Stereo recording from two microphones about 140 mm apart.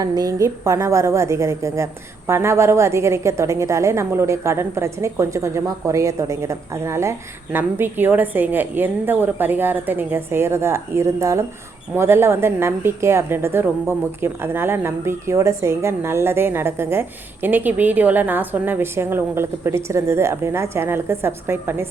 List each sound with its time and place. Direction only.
0.0 s a woman's voice: 25° right (ahead or behind)